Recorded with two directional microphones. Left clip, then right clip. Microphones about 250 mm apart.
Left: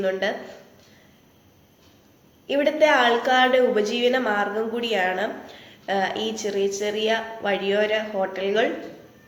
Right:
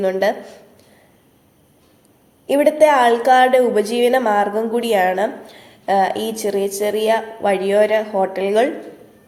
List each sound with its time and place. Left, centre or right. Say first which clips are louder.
0.0 s a woman's voice: right 7 dB; right
2.5 s a woman's voice: right 6 dB; right